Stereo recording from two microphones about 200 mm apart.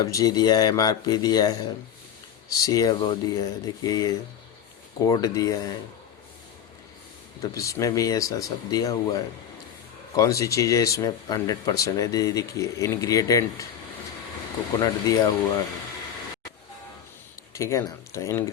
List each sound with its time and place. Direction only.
0.0 s speech: 20° left (ahead or behind)
7.5 s speech: 15° left (ahead or behind)
14.8 s speech: 20° left (ahead or behind)
17.5 s speech: 15° left (ahead or behind)